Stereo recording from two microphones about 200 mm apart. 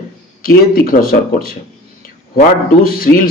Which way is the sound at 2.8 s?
45° left (ahead or behind).